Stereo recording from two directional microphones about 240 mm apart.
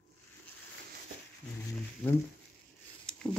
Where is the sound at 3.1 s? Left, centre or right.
Centre.